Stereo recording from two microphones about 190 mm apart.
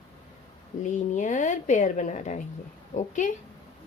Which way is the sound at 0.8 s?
40° left (ahead or behind).